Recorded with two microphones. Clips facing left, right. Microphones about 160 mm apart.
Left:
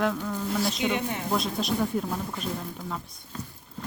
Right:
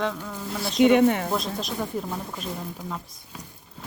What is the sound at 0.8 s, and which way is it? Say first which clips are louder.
Speech: right 11 dB; 60° right (ahead or behind).